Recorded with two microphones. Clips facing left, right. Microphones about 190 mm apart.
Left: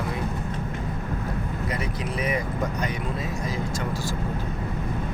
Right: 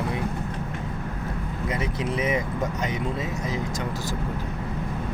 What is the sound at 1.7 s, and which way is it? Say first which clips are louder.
Speech: right 5 dB; 25° right (ahead or behind).